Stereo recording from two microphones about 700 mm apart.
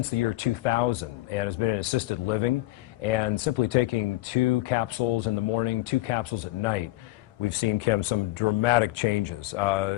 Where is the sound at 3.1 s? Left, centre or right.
Left.